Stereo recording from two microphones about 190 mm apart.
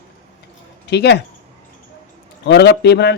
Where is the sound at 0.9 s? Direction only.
60° left (ahead or behind).